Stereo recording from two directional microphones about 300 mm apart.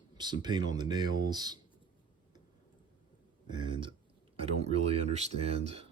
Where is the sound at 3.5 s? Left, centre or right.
Centre.